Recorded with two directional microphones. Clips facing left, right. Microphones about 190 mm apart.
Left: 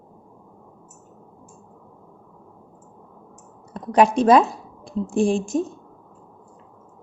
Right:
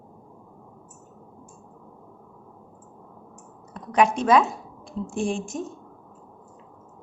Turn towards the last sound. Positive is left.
turn(degrees=35)  # may be behind; listen again after turning